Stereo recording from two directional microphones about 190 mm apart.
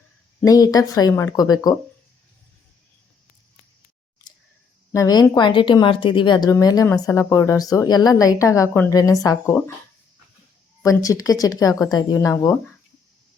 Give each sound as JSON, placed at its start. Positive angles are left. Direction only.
{"t": 0.4, "sound": "speech", "side_deg": 20}
{"t": 4.9, "sound": "speech", "side_deg": 20}
{"t": 10.8, "sound": "speech", "side_deg": 15}